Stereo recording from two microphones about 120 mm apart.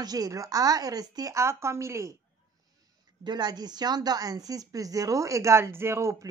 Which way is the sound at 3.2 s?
35° right (ahead or behind).